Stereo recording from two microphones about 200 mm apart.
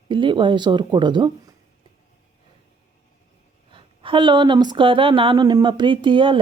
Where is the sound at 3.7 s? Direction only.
25° right (ahead or behind).